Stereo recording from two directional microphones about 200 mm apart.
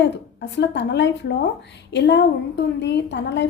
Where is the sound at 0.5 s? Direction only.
60° left (ahead or behind).